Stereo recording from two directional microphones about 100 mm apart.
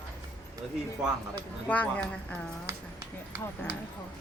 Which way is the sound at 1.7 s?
15° left (ahead or behind).